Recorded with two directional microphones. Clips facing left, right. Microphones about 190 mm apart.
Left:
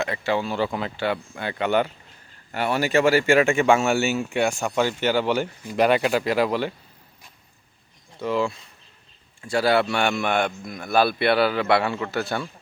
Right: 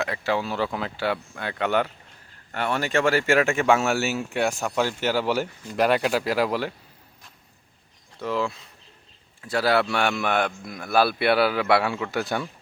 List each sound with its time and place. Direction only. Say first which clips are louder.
0.0 s speech: left 1 dB; centre (ahead or behind)
8.2 s speech: left 3 dB; centre (ahead or behind); by 12.5 s 15° right (ahead or behind)